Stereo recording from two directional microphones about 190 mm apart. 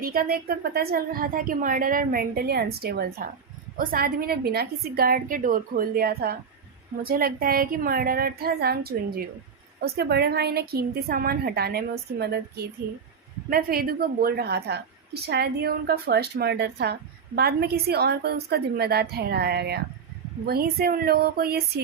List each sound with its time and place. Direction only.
0.0 s a woman's voice: 50° right (ahead or behind)
13.5 s a woman's voice: 50° right (ahead or behind)